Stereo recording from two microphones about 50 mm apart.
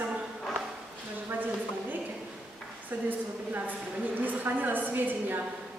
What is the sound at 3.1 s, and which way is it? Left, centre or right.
A woman's voice, right.